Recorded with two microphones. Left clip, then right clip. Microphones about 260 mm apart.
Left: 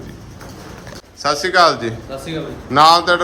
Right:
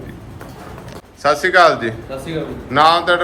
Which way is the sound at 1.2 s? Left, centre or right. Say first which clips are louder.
Right 2 dB; centre.